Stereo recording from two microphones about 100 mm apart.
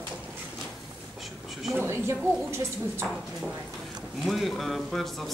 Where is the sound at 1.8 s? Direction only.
25° right (ahead or behind).